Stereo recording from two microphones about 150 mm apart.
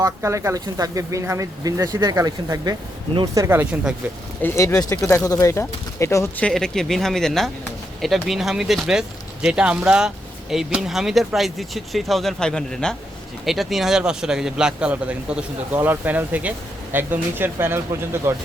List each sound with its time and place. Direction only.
0.0 s speech: 20° right (ahead or behind)
4.4 s speech: 20° left (ahead or behind)
6.4 s speech: 5° left (ahead or behind); by 18.3 s 15° right (ahead or behind)